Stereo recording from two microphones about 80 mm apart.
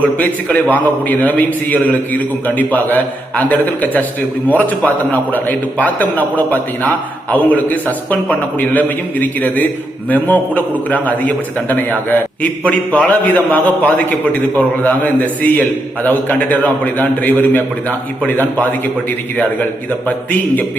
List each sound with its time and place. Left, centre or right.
0.0 s a man's voice: left